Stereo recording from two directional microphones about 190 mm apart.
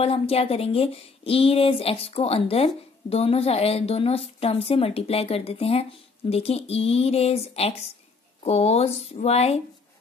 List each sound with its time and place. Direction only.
0.0 s speech: 30° left (ahead or behind)